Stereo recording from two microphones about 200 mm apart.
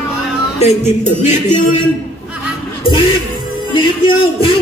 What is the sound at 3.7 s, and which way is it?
Speech, 25° left (ahead or behind).